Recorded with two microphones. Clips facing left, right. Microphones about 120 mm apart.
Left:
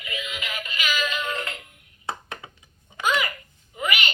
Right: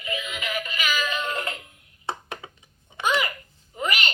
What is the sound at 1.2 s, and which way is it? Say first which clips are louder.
Music: right 1 dB; 35° right (ahead or behind).